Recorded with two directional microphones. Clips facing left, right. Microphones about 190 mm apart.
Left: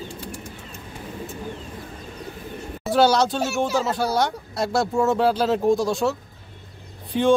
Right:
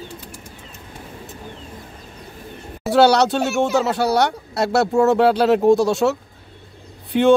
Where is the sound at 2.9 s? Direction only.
70° right (ahead or behind).